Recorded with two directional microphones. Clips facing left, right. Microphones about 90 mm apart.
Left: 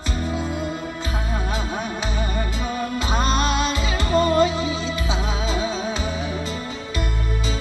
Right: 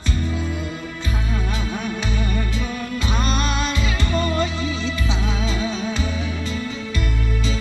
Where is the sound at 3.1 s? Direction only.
35° left (ahead or behind).